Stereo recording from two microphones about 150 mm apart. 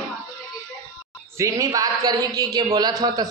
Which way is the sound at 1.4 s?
20° right (ahead or behind).